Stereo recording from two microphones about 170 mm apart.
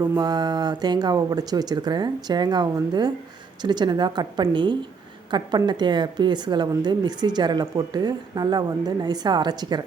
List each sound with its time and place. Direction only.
0.0 s a woman's voice: 20° right (ahead or behind)